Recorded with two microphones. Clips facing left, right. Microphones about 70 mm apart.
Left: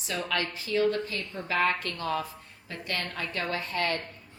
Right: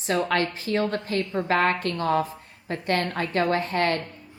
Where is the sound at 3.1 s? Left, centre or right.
Right.